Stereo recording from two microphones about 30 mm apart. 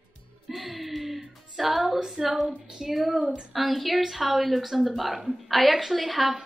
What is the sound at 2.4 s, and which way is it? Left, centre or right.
Speech, centre.